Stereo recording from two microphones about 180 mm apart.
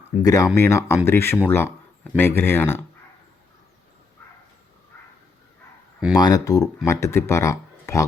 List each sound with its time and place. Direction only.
0.2 s speech: 20° left (ahead or behind)
6.1 s speech: 20° left (ahead or behind)